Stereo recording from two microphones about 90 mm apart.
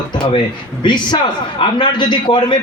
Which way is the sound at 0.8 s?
55° left (ahead or behind).